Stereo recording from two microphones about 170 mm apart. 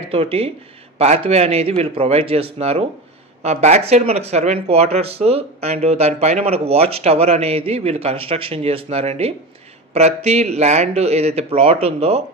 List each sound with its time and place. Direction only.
0.1 s speech: 35° right (ahead or behind)